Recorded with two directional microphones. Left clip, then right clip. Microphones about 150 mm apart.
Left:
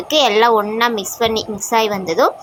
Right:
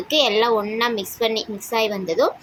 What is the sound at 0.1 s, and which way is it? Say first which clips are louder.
A woman's voice: left 5 dB; 15° left (ahead or behind).